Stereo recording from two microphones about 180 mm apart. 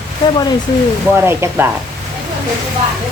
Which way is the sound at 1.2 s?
10° right (ahead or behind).